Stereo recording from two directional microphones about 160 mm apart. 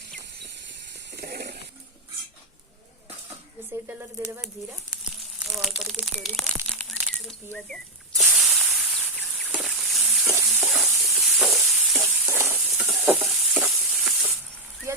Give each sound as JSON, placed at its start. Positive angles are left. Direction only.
{"t": 1.1, "sound": "a sound", "side_deg": -80}
{"t": 3.7, "sound": "speech", "side_deg": -15}
{"t": 5.5, "sound": "speech", "side_deg": 0}
{"t": 6.7, "sound": "crumpling", "side_deg": 5}
{"t": 7.5, "sound": "snake", "side_deg": 0}
{"t": 10.2, "sound": "stir", "side_deg": -15}
{"t": 10.7, "sound": "sizzle", "side_deg": 0}
{"t": 12.8, "sound": "stir", "side_deg": 0}
{"t": 14.9, "sound": "a sound", "side_deg": -15}